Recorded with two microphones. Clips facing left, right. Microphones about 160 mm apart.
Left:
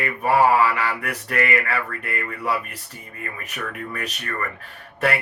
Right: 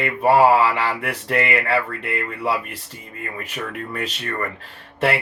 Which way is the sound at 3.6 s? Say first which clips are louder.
Right 2 dB; 25° right (ahead or behind).